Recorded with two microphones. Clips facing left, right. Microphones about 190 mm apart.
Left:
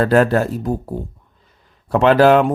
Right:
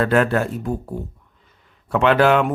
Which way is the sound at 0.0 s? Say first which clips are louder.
Left 4 dB; 35° left (ahead or behind).